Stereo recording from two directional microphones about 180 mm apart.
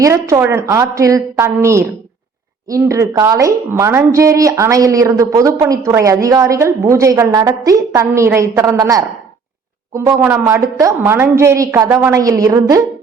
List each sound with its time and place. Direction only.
0.0 s a woman's voice: 15° right (ahead or behind)